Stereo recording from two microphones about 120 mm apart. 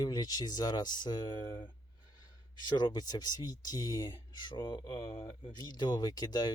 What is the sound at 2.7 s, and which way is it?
Speech, 35° left (ahead or behind).